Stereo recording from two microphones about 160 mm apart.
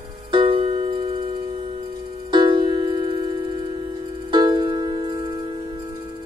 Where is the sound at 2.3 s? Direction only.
30° right (ahead or behind).